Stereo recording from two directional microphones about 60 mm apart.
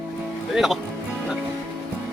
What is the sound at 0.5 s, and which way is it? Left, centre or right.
Speech, centre.